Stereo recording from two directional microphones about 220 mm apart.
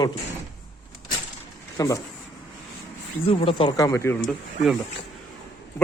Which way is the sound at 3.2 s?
25° left (ahead or behind).